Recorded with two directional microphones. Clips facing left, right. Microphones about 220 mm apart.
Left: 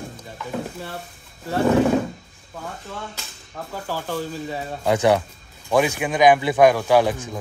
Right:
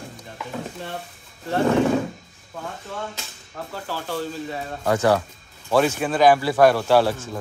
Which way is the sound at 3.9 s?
10° left (ahead or behind).